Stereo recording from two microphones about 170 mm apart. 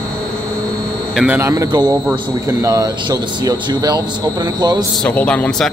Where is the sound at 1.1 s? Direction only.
10° right (ahead or behind); by 4.8 s 25° right (ahead or behind).